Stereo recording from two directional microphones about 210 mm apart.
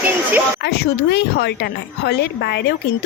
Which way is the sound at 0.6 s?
50° left (ahead or behind).